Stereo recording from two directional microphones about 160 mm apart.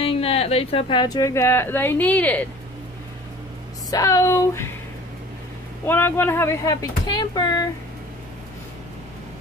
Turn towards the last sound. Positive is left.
turn(degrees=25)  # may be behind; listen again after turning